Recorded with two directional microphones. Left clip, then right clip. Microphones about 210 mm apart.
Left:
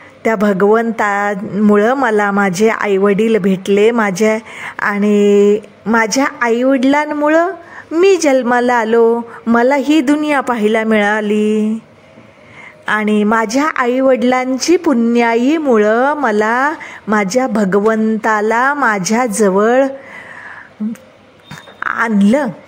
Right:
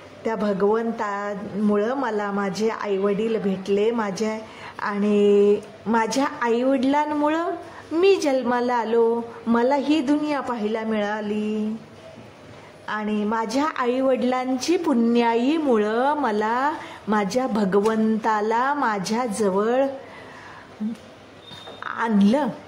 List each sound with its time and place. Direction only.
0.2 s speech: 40° left (ahead or behind)
12.8 s a woman's voice: 35° left (ahead or behind)
21.7 s a woman's voice: 30° left (ahead or behind)